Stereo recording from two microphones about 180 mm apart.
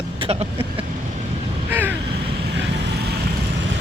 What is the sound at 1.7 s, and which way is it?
Crow, 10° right (ahead or behind).